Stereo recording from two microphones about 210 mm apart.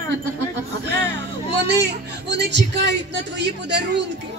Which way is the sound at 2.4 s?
55° right (ahead or behind).